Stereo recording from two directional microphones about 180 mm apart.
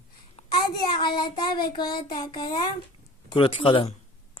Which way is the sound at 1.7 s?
25° left (ahead or behind).